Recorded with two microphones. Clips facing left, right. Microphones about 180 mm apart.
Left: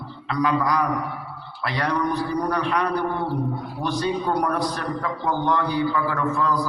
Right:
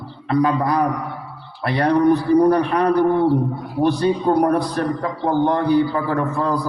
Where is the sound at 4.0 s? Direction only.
35° right (ahead or behind).